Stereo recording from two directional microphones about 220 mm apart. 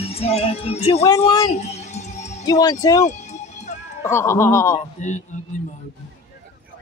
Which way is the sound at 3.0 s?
35° left (ahead or behind).